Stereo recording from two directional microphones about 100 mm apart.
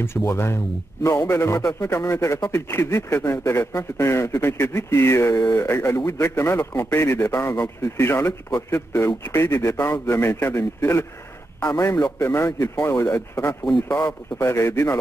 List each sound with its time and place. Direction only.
0.3 s a man's voice: 25° left (ahead or behind)